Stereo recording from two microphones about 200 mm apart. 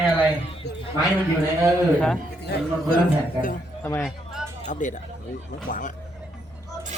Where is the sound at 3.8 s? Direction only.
10° left (ahead or behind).